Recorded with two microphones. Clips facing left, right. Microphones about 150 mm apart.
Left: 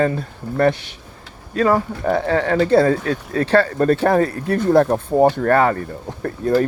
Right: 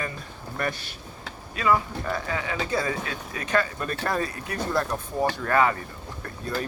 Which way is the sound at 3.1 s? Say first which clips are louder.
Left 11 dB; 35° left (ahead or behind).